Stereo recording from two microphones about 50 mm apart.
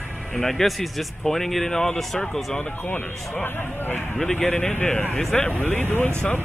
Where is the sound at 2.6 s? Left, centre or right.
Left.